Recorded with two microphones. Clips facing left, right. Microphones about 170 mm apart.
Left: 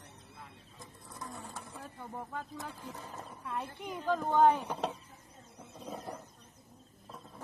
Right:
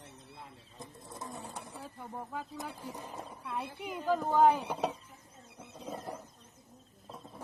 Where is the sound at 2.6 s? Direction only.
10° right (ahead or behind).